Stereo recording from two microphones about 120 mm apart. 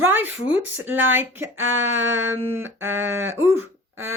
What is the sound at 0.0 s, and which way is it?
Speech, 15° right (ahead or behind).